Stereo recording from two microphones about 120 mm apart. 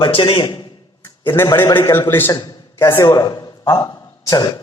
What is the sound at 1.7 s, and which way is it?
A man's voice, 20° left (ahead or behind).